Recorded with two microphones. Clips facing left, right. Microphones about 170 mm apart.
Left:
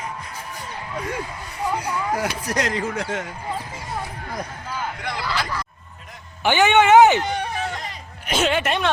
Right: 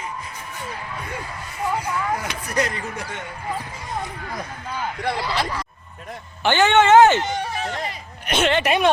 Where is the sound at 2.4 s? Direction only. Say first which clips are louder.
Left 1 dB; 90° left.